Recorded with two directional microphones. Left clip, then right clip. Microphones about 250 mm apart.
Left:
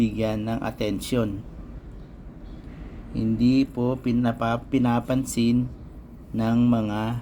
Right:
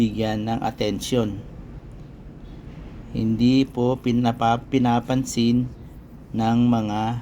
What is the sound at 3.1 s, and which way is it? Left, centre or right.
Speech, centre.